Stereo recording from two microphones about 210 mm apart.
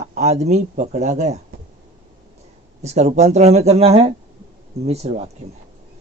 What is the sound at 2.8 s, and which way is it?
Speech, 30° right (ahead or behind).